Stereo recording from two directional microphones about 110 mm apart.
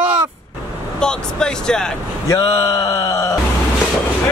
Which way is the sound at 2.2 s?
30° left (ahead or behind).